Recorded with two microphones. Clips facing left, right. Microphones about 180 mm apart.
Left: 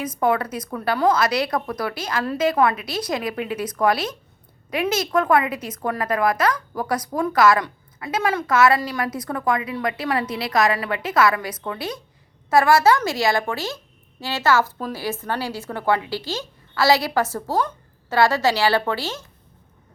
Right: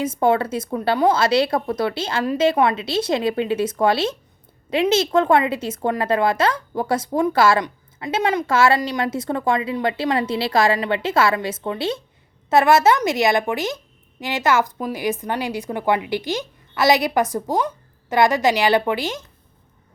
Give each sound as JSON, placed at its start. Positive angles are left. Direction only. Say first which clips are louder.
{"t": 0.0, "sound": "a woman's voice", "louder": "right 3 dB", "side_deg": -25}